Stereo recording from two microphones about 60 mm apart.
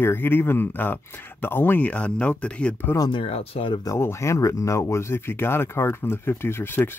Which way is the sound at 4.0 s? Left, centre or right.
Left.